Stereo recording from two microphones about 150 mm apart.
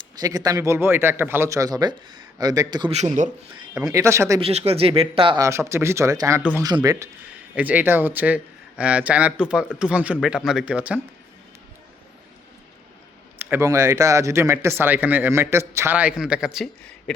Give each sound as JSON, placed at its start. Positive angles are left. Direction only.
{"t": 0.0, "sound": "a man's voice", "side_deg": -25}
{"t": 2.9, "sound": "speech", "side_deg": -50}
{"t": 3.8, "sound": "a man's voice", "side_deg": -20}
{"t": 4.4, "sound": "speech", "side_deg": -40}
{"t": 5.4, "sound": "a man's voice", "side_deg": -20}
{"t": 7.5, "sound": "speech", "side_deg": -10}
{"t": 13.4, "sound": "speech", "side_deg": -15}